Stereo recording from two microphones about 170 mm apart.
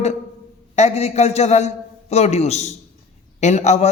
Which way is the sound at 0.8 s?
40° left (ahead or behind).